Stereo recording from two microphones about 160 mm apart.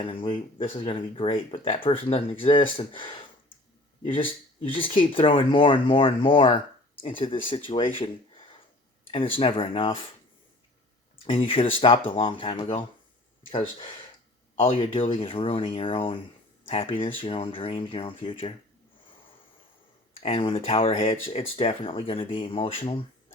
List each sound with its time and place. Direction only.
0.0 s speech: 35° left (ahead or behind)
11.3 s speech: 35° left (ahead or behind)
13.5 s speech: 35° left (ahead or behind)
20.2 s speech: 40° left (ahead or behind)